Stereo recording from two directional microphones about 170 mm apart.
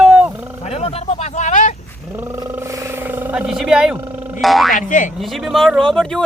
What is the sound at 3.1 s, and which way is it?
Speech, 10° right (ahead or behind).